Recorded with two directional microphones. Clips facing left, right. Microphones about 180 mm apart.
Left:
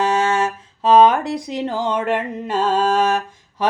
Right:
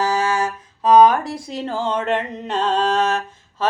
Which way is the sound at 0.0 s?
20° left (ahead or behind).